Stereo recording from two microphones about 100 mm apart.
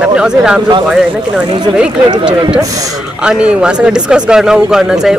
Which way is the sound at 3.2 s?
10° right (ahead or behind).